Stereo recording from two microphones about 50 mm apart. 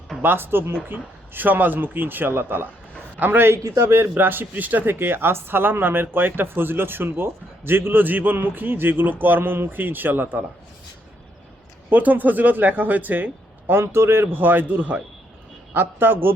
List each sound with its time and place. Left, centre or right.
0.2 s speech: right
3.5 s a man's voice: right
4.1 s speech: right
11.9 s speech: right
13.7 s speech: right